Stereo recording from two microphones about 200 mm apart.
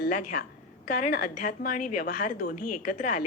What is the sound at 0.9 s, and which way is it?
A woman's voice, 50° left (ahead or behind).